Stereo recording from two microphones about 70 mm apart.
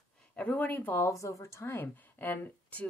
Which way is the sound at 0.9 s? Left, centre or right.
Left.